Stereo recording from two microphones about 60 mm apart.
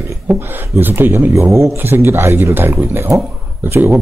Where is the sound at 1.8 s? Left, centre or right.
Right.